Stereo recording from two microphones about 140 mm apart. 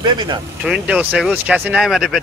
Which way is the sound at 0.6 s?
5° right (ahead or behind).